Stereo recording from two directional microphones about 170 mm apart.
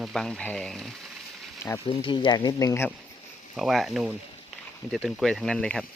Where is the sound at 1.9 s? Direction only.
30° left (ahead or behind).